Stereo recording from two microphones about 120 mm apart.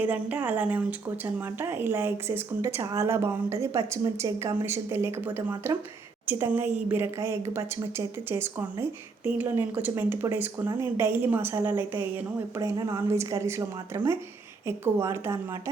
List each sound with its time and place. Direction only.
0.0 s a woman's voice: 15° right (ahead or behind)